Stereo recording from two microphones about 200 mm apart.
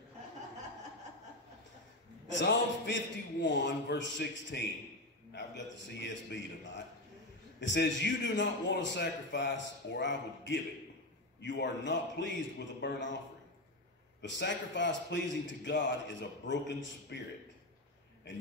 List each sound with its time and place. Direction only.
2.4 s a man's voice: 65° left (ahead or behind)
14.2 s a man's voice: 65° left (ahead or behind)